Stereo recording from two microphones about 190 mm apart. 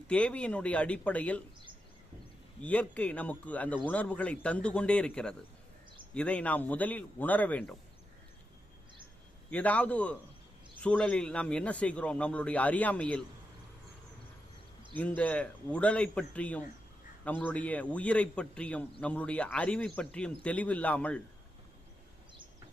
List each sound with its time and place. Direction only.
0.1 s a man's voice: 5° left (ahead or behind)
2.6 s a man's voice: 5° left (ahead or behind)
9.5 s a man's voice: 5° left (ahead or behind)
14.9 s a man's voice: 10° left (ahead or behind)